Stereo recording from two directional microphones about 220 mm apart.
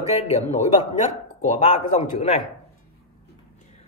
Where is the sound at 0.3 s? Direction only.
30° left (ahead or behind).